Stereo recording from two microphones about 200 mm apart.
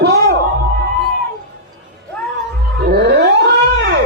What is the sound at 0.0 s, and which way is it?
Music, 55° right (ahead or behind).